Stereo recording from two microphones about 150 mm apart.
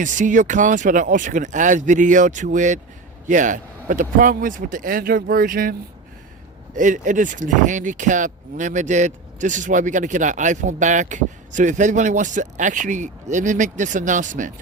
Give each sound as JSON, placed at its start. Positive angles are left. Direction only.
{"t": 0.0, "sound": "speech", "side_deg": -60}
{"t": 6.7, "sound": "speech", "side_deg": -55}